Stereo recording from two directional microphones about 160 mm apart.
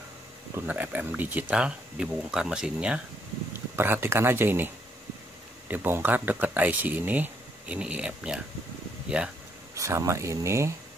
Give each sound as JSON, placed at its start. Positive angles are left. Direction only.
{"t": 0.6, "sound": "speech", "side_deg": -10}
{"t": 5.7, "sound": "speech", "side_deg": -10}
{"t": 9.8, "sound": "speech", "side_deg": -20}